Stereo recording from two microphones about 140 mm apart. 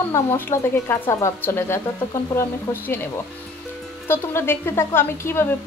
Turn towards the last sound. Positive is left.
turn(degrees=15)  # may be behind; listen again after turning